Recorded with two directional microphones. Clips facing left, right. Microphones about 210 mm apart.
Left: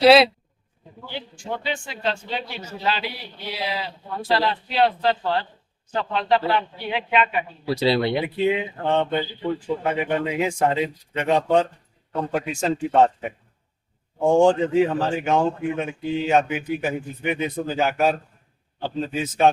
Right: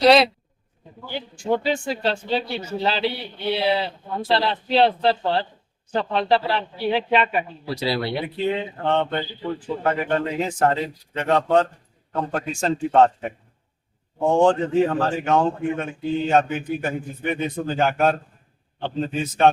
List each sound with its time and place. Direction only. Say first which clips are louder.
0.0 s a man's voice: left 1 dB; 5° left (ahead or behind)
1.5 s speech: right 8 dB; 40° right (ahead or behind)
7.8 s speech: left 4 dB; 25° left (ahead or behind)
8.2 s speech: left 2 dB; 10° left (ahead or behind)